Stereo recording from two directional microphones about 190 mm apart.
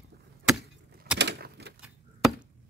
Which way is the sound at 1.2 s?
65° right (ahead or behind).